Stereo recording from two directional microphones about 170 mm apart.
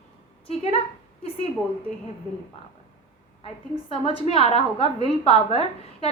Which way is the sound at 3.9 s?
35° left (ahead or behind).